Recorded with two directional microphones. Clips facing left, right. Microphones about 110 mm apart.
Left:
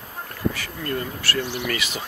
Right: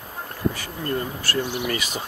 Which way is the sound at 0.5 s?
25° right (ahead or behind).